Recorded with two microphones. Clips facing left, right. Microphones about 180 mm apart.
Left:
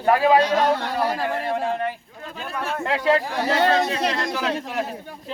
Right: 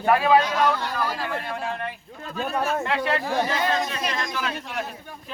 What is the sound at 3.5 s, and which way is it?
Speech, 70° left (ahead or behind).